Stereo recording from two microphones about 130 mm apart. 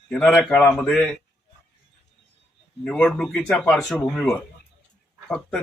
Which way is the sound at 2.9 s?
5° left (ahead or behind).